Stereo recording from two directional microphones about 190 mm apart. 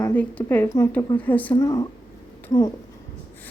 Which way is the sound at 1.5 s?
20° left (ahead or behind).